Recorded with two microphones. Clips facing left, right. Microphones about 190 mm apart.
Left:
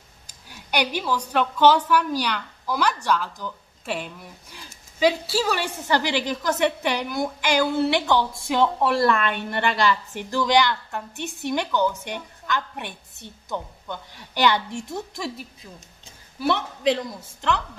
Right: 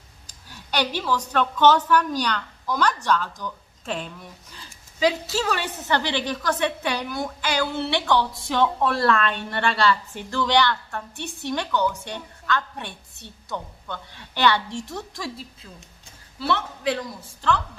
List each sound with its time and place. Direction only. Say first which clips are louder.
0.5 s a woman's voice: left 1 dB; 10° left (ahead or behind)